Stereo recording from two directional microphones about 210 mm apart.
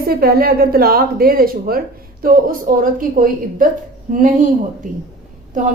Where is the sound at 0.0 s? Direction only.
45° right (ahead or behind).